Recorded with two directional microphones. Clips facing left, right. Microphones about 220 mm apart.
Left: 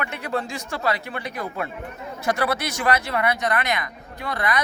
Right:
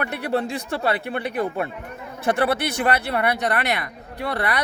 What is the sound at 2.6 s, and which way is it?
Speech, 55° right (ahead or behind).